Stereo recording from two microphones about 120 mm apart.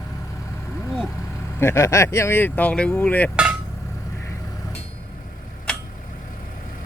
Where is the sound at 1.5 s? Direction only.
20° left (ahead or behind).